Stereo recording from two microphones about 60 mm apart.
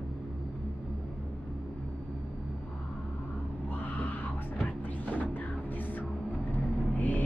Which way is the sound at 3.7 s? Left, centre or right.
Left.